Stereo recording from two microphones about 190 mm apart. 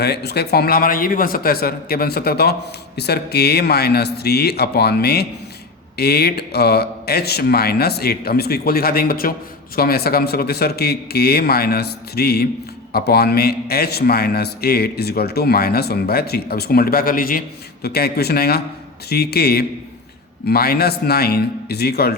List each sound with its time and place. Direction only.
0.0 s a man's voice: 60° left (ahead or behind)